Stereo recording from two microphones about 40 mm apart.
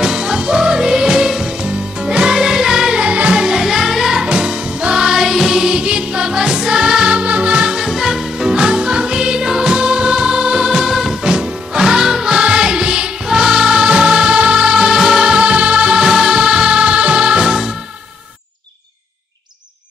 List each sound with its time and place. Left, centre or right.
0.0 s music: centre
2.3 s music: centre
3.0 s music: right
3.3 s music: centre
5.0 s music: centre
11.2 s music: centre
15.2 s music: right
16.1 s music: centre